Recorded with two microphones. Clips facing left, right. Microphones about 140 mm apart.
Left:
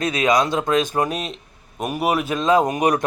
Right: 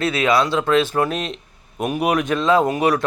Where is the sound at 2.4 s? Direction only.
20° left (ahead or behind).